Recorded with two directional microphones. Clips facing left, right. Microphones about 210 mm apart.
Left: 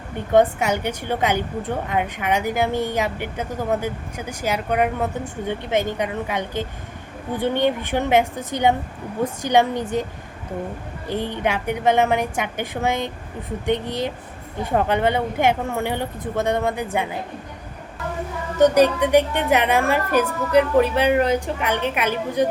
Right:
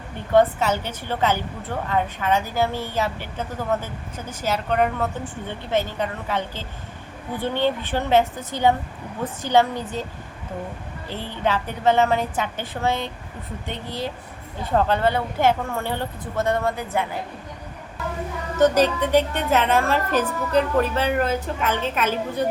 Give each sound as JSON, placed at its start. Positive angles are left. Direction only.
{"t": 0.3, "sound": "a woman's voice", "side_deg": 15}
{"t": 11.1, "sound": "a woman's voice", "side_deg": 15}
{"t": 18.5, "sound": "a woman's voice", "side_deg": 15}